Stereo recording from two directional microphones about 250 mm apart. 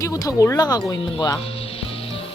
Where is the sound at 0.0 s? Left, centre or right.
Centre.